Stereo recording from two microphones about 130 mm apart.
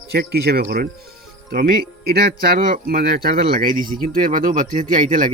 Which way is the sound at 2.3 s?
90° right.